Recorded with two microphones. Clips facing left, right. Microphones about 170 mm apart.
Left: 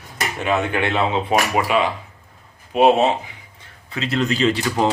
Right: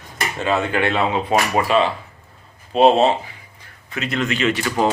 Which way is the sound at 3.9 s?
30° left (ahead or behind).